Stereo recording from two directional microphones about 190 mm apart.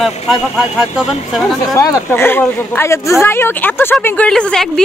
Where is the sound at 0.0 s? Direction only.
Centre (ahead or behind).